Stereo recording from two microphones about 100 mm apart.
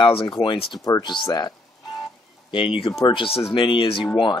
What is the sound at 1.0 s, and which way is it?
Speech, 50° left (ahead or behind).